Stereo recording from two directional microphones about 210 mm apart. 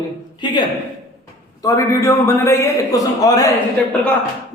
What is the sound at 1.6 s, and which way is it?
A man's voice, 15° left (ahead or behind).